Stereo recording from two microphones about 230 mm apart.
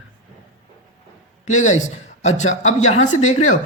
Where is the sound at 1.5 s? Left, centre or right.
Left.